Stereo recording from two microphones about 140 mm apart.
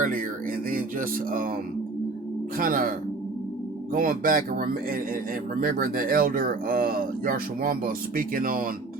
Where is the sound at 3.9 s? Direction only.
80° right.